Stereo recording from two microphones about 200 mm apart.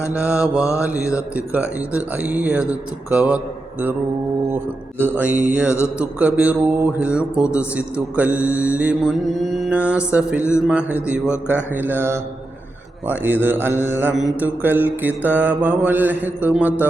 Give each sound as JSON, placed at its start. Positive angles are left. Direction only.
{"t": 0.1, "sound": "mantra", "side_deg": -5}
{"t": 0.3, "sound": "mantra", "side_deg": 15}
{"t": 0.8, "sound": "mantra", "side_deg": -5}
{"t": 4.9, "sound": "mantra", "side_deg": -10}